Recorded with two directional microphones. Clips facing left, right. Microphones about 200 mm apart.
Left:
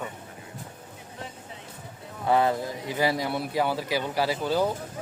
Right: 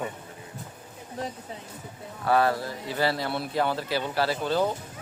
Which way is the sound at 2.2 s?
20° left (ahead or behind).